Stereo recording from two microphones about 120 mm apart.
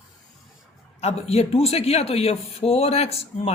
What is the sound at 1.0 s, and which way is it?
Speech, 60° left (ahead or behind).